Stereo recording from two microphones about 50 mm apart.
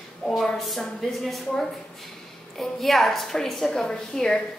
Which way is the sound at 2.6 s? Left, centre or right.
Centre.